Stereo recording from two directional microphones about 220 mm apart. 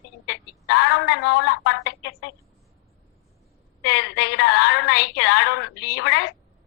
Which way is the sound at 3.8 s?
50° left (ahead or behind).